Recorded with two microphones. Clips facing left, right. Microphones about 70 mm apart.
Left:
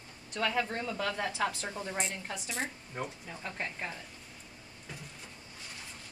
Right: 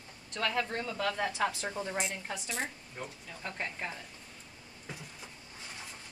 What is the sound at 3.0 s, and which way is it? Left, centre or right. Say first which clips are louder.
Speech: left 5 dB; left.